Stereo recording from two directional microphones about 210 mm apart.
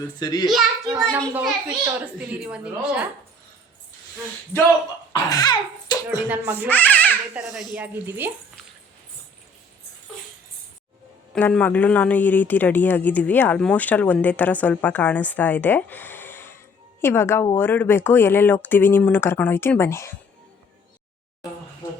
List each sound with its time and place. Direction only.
0.2 s a child's voice: 20° left (ahead or behind)
1.1 s a child's voice: 5° right (ahead or behind)
5.1 s speech: 20° left (ahead or behind)
6.2 s a child's voice: 10° right (ahead or behind)
6.7 s baby cry: 10° left (ahead or behind)
7.3 s speech: centre (ahead or behind)
11.3 s speech: 10° left (ahead or behind)